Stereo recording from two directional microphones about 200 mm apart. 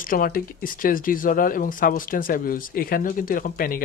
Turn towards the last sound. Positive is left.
turn(degrees=45)  # may be behind; listen again after turning